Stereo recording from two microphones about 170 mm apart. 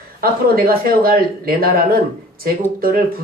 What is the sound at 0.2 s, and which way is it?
Speech, 60° right (ahead or behind).